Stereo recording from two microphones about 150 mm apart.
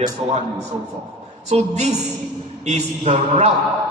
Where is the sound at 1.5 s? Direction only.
50° right (ahead or behind).